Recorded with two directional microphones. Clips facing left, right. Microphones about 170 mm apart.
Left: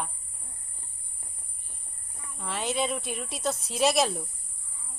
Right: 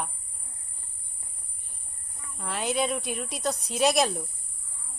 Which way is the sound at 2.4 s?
Centre (ahead or behind).